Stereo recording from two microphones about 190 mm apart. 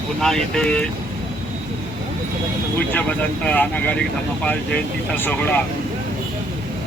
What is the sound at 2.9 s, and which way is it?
Speech, 10° left (ahead or behind).